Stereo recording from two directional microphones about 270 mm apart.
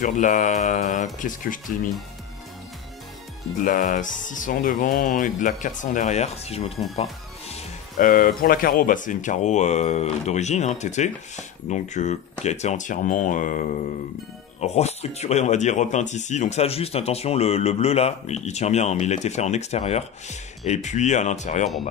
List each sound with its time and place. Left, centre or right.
0.0 s speech: left
3.6 s speech: left